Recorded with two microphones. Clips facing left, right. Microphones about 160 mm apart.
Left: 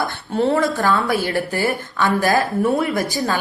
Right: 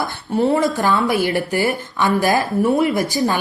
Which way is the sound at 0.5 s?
15° right (ahead or behind).